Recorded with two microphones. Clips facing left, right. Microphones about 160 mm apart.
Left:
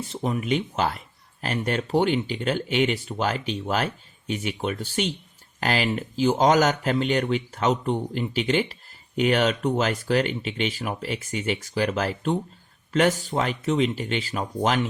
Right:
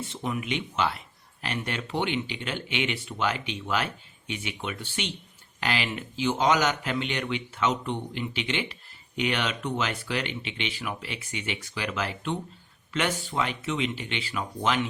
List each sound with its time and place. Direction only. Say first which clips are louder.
0.0 s speech: left 4 dB; 35° left (ahead or behind)